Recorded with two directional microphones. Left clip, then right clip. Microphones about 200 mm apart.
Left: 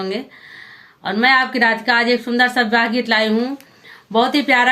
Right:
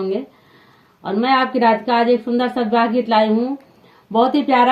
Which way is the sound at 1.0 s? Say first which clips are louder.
Left 2 dB; 20° left (ahead or behind).